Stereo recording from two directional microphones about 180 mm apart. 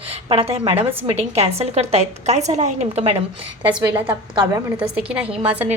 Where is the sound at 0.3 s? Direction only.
35° right (ahead or behind).